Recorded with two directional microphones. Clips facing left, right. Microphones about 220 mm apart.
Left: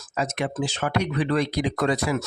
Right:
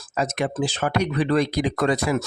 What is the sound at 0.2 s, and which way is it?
Speech, 40° right (ahead or behind).